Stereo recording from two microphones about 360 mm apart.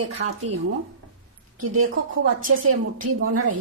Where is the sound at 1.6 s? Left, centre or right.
Right.